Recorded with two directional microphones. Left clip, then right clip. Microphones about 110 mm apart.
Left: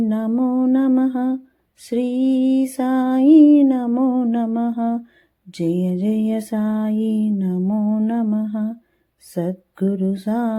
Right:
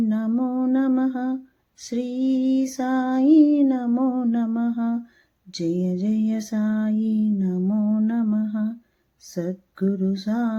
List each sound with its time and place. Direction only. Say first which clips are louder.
0.0 s music: left 3 dB; 40° left (ahead or behind)
0.3 s humming: left 7 dB; 25° left (ahead or behind)
1.8 s lullaby: left 6 dB; 35° left (ahead or behind)